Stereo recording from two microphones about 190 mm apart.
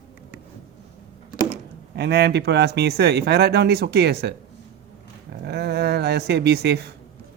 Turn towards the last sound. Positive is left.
turn(degrees=-60)  # may be behind; listen again after turning